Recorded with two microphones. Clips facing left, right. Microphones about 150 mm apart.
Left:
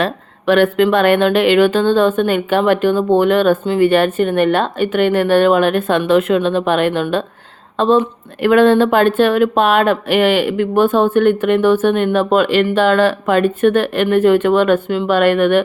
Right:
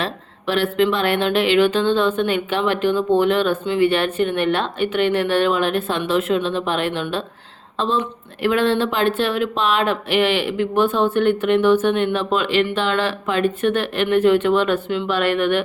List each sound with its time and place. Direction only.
0.0 s speech: 55° left (ahead or behind)